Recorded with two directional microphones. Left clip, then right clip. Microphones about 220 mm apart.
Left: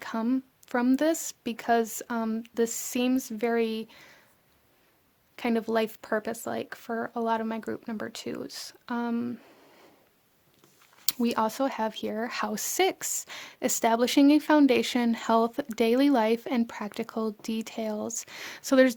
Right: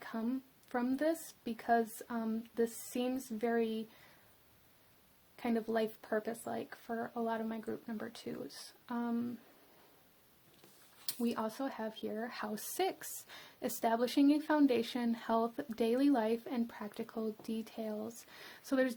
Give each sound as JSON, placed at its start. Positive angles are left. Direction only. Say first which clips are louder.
{"t": 0.0, "sound": "speech", "louder": "left 10 dB", "side_deg": 40}
{"t": 5.4, "sound": "speech", "louder": "left 8 dB", "side_deg": 35}
{"t": 11.0, "sound": "speech", "louder": "left 11 dB", "side_deg": 40}